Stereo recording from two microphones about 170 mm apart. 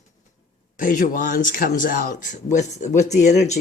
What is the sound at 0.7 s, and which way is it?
Speech, 50° left (ahead or behind).